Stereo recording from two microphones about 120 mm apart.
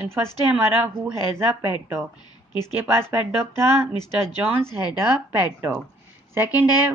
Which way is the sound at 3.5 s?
35° left (ahead or behind).